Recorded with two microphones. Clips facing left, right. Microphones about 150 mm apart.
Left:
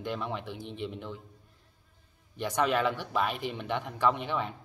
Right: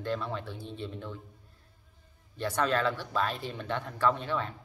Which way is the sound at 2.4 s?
15° left (ahead or behind).